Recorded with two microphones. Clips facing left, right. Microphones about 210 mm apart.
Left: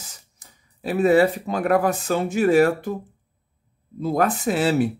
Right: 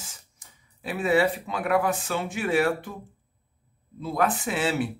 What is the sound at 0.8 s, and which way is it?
Speech, 40° left (ahead or behind).